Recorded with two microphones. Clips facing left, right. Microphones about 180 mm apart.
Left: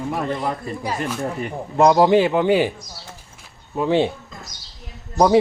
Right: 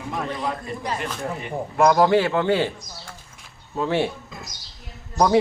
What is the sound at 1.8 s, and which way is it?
Speech, 20° left (ahead or behind).